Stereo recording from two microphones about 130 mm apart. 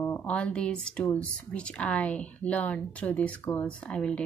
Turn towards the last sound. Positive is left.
turn(degrees=5)  # may be behind; listen again after turning